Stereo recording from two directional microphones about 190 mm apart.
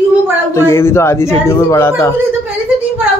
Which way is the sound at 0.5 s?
15° left (ahead or behind).